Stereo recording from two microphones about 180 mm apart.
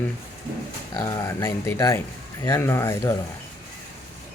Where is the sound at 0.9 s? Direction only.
15° left (ahead or behind).